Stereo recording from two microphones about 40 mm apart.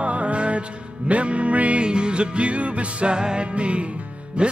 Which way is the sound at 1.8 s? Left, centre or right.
Right.